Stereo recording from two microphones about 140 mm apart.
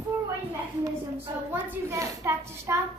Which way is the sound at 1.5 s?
20° right (ahead or behind).